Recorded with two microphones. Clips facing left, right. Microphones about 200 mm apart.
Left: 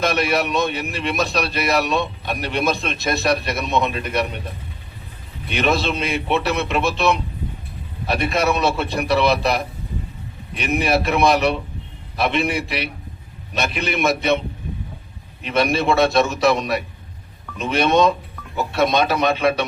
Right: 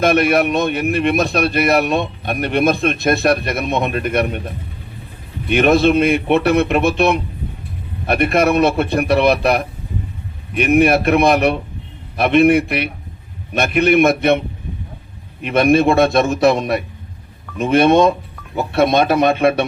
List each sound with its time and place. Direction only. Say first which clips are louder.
0.0 s a man's voice: right 6 dB; 55° right (ahead or behind)
5.5 s a man's voice: right 8 dB; 55° right (ahead or behind)